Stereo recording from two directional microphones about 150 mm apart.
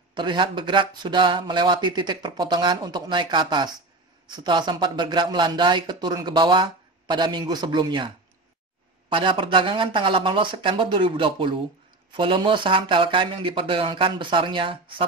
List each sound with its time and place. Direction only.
0.1 s speech: 30° right (ahead or behind)
9.1 s speech: 35° right (ahead or behind)